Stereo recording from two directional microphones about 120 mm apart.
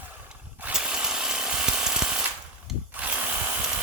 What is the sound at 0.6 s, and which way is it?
Tools, 5° right (ahead or behind).